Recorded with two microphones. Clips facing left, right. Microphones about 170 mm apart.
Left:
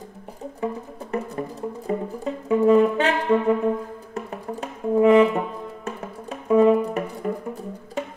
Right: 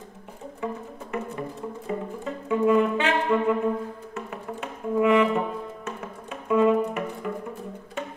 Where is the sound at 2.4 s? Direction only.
35° left (ahead or behind).